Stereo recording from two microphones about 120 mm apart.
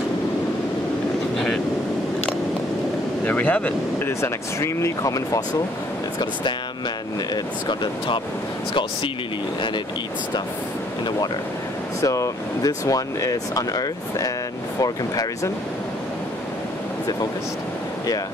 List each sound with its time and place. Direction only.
1.3 s vehicle: centre (ahead or behind)
3.3 s speech: 10° left (ahead or behind); by 5.4 s 30° left (ahead or behind)
7.6 s speech: 40° left (ahead or behind)
12.0 s speech: 25° left (ahead or behind)